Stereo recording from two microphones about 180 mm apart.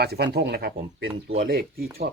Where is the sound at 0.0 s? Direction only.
65° right (ahead or behind).